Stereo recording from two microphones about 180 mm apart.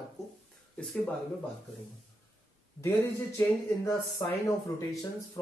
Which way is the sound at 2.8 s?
15° left (ahead or behind).